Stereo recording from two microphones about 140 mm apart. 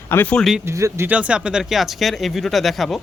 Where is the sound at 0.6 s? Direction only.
20° right (ahead or behind).